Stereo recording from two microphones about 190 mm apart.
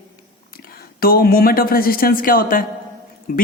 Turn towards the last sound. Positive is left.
turn(degrees=50)  # may be behind; listen again after turning